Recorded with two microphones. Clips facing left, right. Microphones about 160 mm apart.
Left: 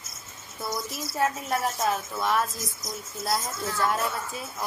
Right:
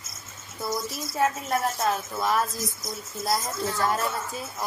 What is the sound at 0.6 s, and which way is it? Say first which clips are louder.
Speech: right 2 dB; centre (ahead or behind).